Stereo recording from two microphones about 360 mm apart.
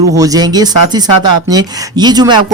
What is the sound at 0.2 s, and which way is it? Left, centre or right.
Speech, centre.